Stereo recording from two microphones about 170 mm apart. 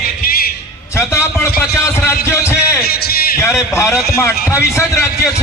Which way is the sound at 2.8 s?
65° left (ahead or behind).